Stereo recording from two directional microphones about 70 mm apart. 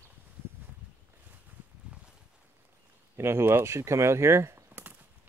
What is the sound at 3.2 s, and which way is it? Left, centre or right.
Speech, right.